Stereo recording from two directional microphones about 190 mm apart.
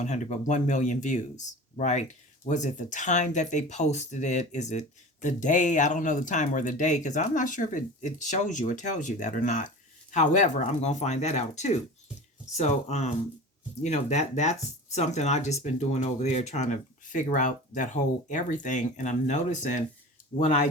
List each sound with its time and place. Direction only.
0.0 s speech: 40° left (ahead or behind)